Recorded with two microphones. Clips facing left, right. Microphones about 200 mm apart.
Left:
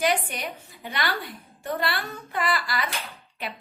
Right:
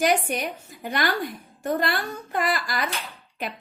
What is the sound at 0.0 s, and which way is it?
A woman's voice, 45° right (ahead or behind).